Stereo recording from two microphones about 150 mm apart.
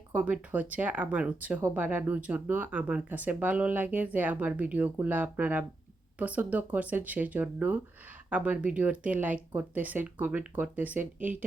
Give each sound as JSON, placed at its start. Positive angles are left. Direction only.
{"t": 0.1, "sound": "speech", "side_deg": -10}